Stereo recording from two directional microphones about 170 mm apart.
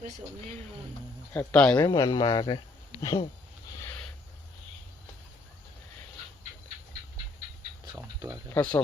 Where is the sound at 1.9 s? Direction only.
25° left (ahead or behind).